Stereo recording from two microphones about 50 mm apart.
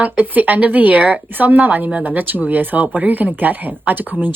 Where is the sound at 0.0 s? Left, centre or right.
Right.